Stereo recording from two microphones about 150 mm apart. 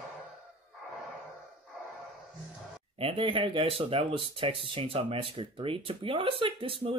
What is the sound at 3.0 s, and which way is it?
Speech, 35° right (ahead or behind).